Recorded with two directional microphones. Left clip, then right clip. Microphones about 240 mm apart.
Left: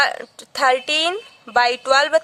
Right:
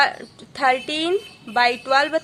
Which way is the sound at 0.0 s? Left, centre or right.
Left.